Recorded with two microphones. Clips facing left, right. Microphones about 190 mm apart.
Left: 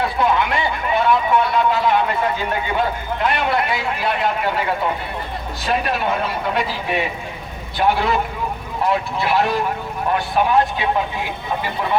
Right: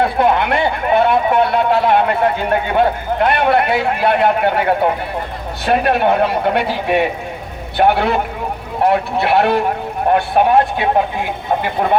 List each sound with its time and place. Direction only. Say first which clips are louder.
0.0 s speech: right 4 dB; 55° right (ahead or behind)